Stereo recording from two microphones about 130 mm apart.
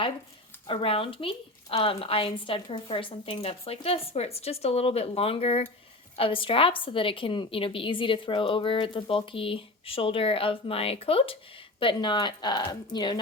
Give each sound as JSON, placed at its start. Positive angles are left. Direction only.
{"t": 0.7, "sound": "a woman's voice", "side_deg": 45}